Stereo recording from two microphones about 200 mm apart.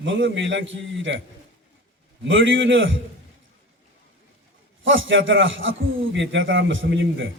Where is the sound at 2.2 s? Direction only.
70° right (ahead or behind).